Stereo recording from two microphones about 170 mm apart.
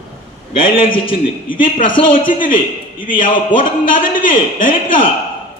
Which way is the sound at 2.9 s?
55° left (ahead or behind).